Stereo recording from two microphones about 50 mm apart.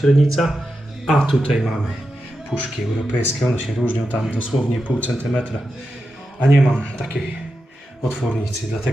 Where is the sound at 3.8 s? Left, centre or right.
Left.